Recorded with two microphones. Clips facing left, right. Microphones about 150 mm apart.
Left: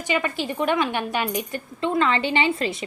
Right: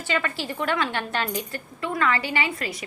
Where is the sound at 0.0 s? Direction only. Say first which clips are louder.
Left 3 dB; 15° left (ahead or behind).